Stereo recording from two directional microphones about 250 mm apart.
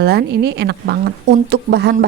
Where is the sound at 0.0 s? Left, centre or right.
Right.